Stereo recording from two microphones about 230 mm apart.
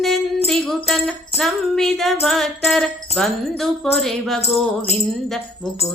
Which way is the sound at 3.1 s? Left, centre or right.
Left.